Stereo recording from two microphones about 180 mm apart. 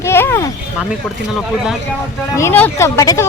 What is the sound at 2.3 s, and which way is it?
Speech, 10° left (ahead or behind).